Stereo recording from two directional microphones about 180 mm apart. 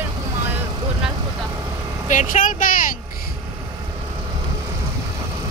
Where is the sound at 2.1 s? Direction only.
45° left (ahead or behind).